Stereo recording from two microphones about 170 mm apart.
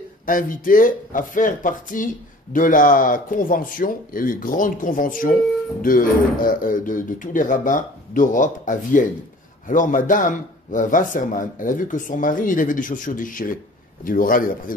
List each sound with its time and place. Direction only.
0.3 s a man's voice: 55° left (ahead or behind)